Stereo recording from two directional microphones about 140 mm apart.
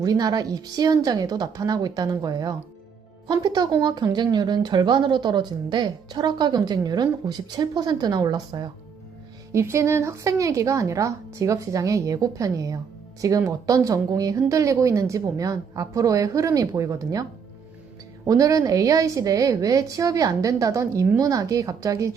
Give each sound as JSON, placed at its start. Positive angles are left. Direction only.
{"t": 0.0, "sound": "a woman's voice", "side_deg": -25}
{"t": 9.5, "sound": "speech", "side_deg": -20}
{"t": 18.3, "sound": "speech", "side_deg": -25}